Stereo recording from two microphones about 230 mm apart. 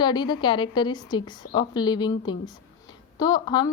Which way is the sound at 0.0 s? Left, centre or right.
Centre.